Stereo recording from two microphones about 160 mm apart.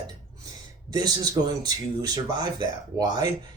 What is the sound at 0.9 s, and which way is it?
Speech, 25° right (ahead or behind).